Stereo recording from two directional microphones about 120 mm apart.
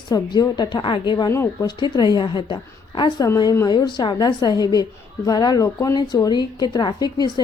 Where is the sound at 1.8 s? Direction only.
35° left (ahead or behind).